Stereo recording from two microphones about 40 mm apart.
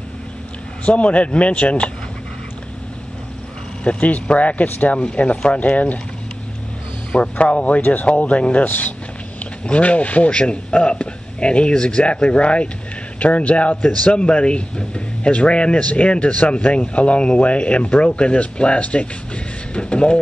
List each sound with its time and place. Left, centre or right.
0.8 s a man's voice: left
3.8 s a man's voice: left
7.1 s a man's voice: left
7.8 s speech: left
8.1 s a man's voice: left
8.6 s speech: left
9.7 s a man's voice: left
10.3 s speech: left